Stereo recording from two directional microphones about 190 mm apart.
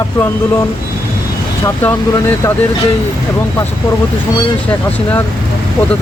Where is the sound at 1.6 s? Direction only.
10° left (ahead or behind).